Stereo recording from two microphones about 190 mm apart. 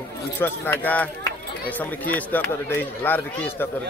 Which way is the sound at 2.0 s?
10° left (ahead or behind).